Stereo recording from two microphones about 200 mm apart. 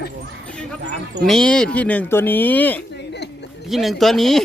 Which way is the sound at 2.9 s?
60° left (ahead or behind).